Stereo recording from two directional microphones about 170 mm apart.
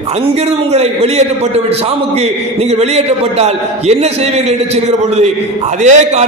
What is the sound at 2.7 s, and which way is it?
A man's voice, 40° right (ahead or behind).